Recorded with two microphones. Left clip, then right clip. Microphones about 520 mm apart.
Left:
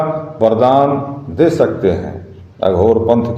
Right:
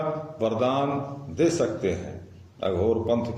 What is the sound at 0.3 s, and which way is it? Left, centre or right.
A man's voice, right.